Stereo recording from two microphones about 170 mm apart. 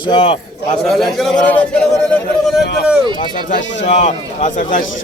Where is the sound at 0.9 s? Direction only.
Centre (ahead or behind).